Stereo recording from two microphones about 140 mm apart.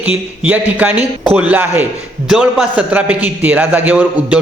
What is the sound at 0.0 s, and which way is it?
A man's voice, 10° right (ahead or behind).